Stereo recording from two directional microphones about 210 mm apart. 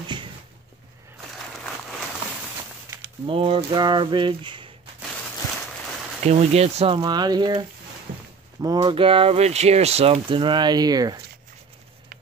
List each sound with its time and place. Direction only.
3.3 s speech: 25° right (ahead or behind)
6.2 s speech: 30° right (ahead or behind)